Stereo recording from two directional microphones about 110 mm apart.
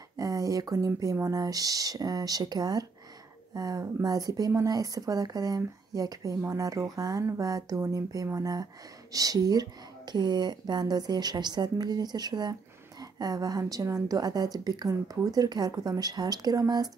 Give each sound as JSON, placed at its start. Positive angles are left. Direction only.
{"t": 0.2, "sound": "a woman's voice", "side_deg": -30}